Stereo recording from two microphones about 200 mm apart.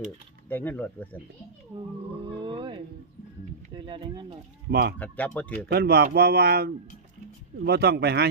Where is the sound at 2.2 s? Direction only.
25° right (ahead or behind).